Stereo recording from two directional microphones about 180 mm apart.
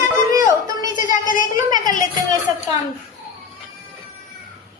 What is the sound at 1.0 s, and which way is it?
Speech, 50° left (ahead or behind).